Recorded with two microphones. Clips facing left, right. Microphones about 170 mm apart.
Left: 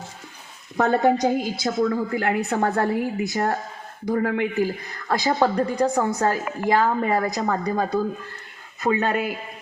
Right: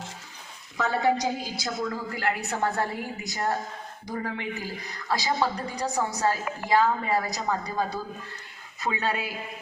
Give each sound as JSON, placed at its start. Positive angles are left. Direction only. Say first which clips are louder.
{"t": 0.8, "sound": "a woman's voice", "louder": "left 6 dB", "side_deg": 55}